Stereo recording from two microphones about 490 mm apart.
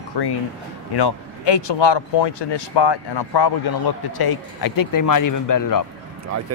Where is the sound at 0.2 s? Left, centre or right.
Left.